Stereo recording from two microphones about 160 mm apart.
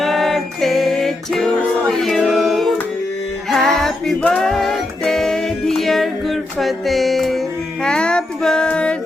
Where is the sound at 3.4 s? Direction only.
Centre (ahead or behind).